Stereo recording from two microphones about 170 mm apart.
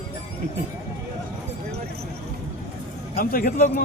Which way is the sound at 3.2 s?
55° left (ahead or behind).